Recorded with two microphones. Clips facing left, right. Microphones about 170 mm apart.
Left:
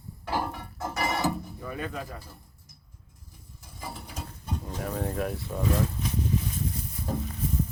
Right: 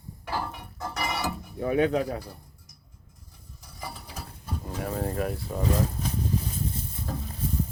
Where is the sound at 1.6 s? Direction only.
75° right (ahead or behind).